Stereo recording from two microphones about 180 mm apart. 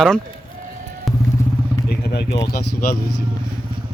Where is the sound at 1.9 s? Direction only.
65° left (ahead or behind).